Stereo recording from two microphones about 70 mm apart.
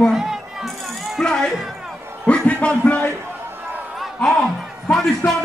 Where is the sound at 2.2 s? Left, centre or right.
Centre.